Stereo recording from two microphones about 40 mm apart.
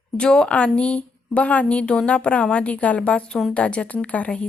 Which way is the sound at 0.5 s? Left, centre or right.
Left.